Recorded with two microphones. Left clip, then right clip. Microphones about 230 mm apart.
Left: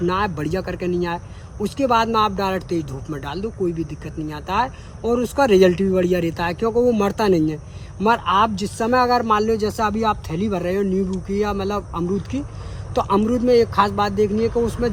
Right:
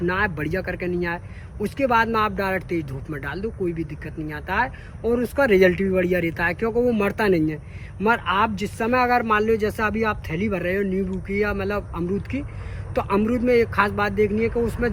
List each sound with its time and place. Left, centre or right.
0.0 s speech: centre